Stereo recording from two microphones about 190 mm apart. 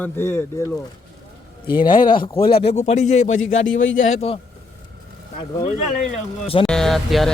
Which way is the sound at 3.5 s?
85° left.